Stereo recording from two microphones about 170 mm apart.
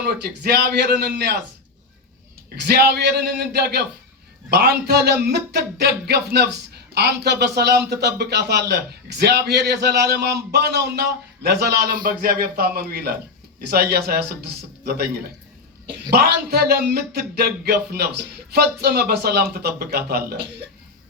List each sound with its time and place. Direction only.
0.0 s speech: 65° right (ahead or behind)
2.6 s a man's voice: 70° right (ahead or behind)